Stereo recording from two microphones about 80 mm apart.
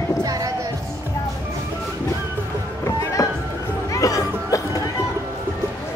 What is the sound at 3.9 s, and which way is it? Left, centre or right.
Chatter, left.